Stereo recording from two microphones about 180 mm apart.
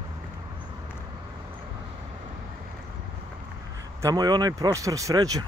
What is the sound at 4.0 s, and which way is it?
Speech, 20° right (ahead or behind).